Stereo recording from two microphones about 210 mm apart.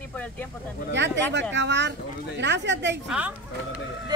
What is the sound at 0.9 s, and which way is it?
Speech, 55° right (ahead or behind).